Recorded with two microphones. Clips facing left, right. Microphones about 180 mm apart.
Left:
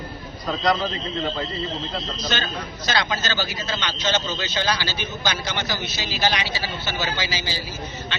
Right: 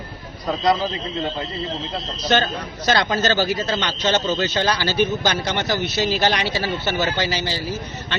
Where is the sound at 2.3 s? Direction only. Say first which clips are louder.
Right 12 dB; 45° right (ahead or behind).